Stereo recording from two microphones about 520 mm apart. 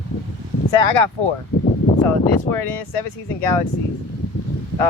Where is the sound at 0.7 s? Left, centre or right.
Left.